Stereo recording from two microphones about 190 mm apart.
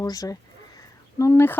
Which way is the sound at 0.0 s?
20° left (ahead or behind).